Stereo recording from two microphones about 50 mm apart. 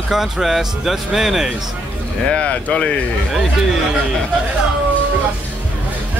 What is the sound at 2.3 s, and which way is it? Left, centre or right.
Speech, left.